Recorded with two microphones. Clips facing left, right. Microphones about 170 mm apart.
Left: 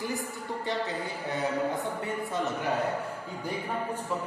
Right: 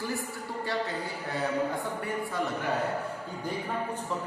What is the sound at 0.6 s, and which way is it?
Speech, 20° left (ahead or behind).